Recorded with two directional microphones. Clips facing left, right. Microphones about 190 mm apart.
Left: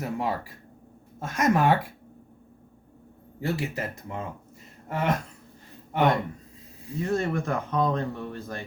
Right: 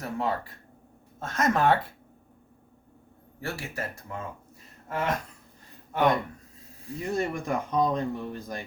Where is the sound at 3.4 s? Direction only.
20° left (ahead or behind).